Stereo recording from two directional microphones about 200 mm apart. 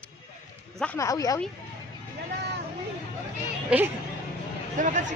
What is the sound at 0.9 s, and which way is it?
Speech, 15° left (ahead or behind).